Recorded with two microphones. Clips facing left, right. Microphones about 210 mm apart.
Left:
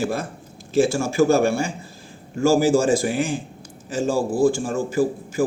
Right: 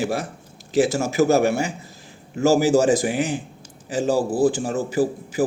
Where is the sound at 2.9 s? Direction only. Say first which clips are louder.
Even; 15° right (ahead or behind).